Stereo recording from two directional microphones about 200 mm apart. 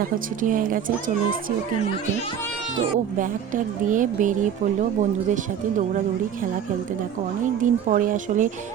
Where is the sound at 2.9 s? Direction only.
40° right (ahead or behind).